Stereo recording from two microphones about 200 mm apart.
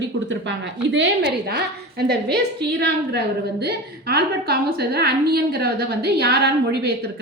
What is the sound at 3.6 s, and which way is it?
A woman's voice, 55° right (ahead or behind).